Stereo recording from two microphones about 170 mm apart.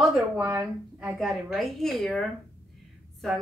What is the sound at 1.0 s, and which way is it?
A woman's voice, centre (ahead or behind).